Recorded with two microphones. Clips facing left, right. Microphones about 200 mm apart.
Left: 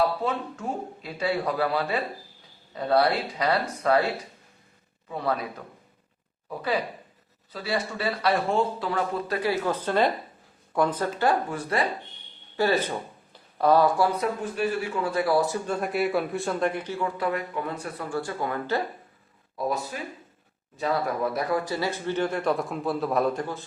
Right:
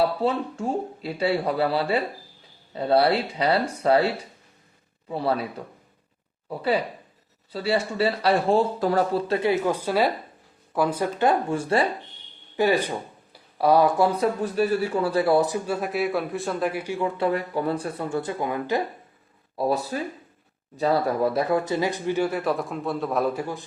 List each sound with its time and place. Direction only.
0.2 s speech: 30° right (ahead or behind)
6.5 s speech: 30° right (ahead or behind)
12.5 s a man's voice: 15° right (ahead or behind)
14.2 s a man's voice: 35° right (ahead or behind); by 17.1 s 10° right (ahead or behind)
17.2 s speech: 30° right (ahead or behind); by 18.8 s 15° right (ahead or behind)
19.5 s a man's voice: 35° right (ahead or behind); by 23.6 s 10° right (ahead or behind)